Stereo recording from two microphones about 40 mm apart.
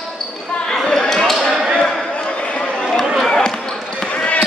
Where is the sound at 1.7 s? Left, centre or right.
Centre.